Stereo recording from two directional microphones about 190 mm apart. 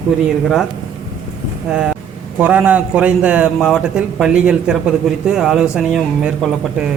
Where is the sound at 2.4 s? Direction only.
10° right (ahead or behind).